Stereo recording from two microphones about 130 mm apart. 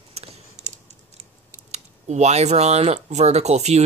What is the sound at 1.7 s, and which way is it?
Speech, 60° right (ahead or behind).